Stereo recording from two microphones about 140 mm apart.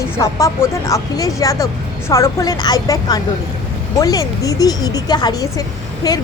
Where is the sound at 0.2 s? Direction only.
25° left (ahead or behind).